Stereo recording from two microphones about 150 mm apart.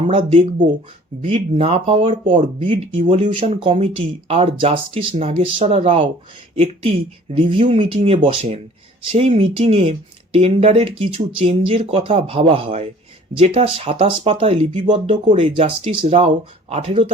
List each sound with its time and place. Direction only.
0.1 s speech: 40° right (ahead or behind)